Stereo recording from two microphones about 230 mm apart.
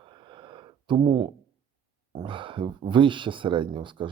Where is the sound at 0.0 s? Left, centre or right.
Right.